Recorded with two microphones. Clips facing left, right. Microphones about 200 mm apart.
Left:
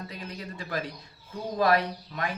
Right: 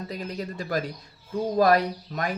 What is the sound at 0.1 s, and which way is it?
Speech, 40° right (ahead or behind).